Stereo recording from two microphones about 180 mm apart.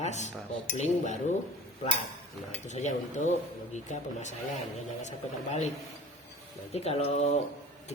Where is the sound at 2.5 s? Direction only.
40° left (ahead or behind).